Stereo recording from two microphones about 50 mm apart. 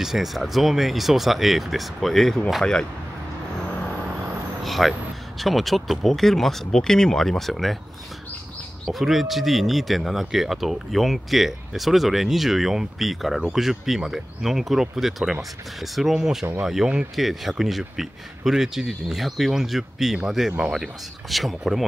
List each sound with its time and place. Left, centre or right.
0.0 s speech: centre
4.6 s a sound: centre
5.4 s speech: centre
8.9 s speech: centre